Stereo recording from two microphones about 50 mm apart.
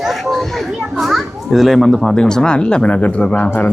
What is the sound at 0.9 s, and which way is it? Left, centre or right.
A child's voice, centre.